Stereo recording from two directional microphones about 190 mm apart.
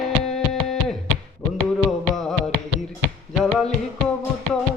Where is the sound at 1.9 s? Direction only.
Centre (ahead or behind).